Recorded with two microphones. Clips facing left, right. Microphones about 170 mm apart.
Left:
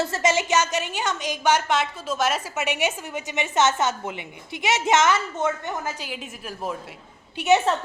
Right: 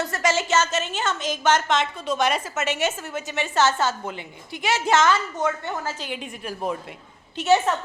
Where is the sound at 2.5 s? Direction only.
15° left (ahead or behind).